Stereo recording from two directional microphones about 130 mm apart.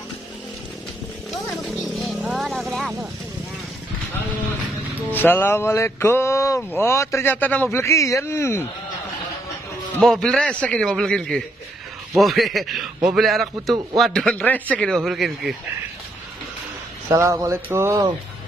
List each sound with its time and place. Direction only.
1.6 s music: centre (ahead or behind)
5.1 s speech: 15° left (ahead or behind)
10.0 s a man's voice: 5° left (ahead or behind)
17.1 s a sound: 25° right (ahead or behind)